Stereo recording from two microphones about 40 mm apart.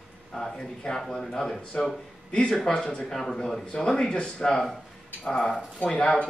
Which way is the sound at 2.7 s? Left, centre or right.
Left.